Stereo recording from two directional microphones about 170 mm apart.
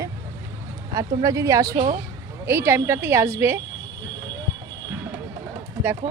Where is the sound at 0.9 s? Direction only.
20° right (ahead or behind).